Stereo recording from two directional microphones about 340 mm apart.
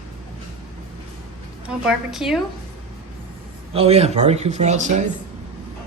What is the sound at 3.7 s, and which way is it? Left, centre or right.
Speech, centre.